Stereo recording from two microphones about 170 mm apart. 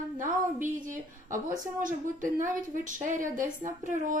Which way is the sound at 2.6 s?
50° right (ahead or behind).